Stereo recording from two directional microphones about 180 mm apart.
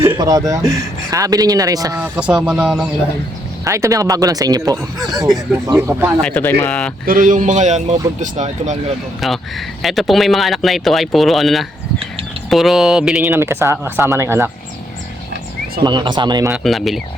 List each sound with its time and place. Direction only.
0.0 s speech: 15° right (ahead or behind)
2.0 s speech: 5° right (ahead or behind)
3.6 s speech: 15° right (ahead or behind)
6.3 s speech: 10° left (ahead or behind)
7.0 s a man's voice: 50° right (ahead or behind)
9.2 s speech: centre (ahead or behind)
13.3 s speech: 15° right (ahead or behind)
15.8 s speech: 25° right (ahead or behind)
16.5 s speech: centre (ahead or behind)